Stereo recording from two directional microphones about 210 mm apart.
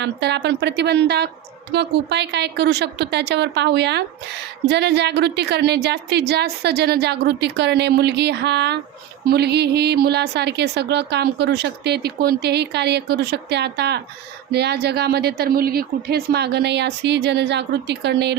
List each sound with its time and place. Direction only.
0.0 s a woman's voice: 55° right (ahead or behind)